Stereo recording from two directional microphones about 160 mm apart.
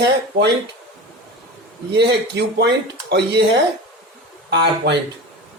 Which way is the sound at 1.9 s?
90° right.